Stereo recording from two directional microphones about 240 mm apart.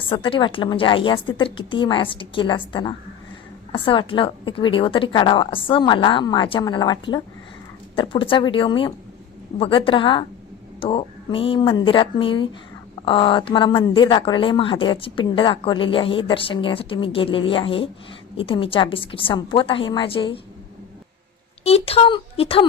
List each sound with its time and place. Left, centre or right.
0.0 s speech: left
21.6 s speech: left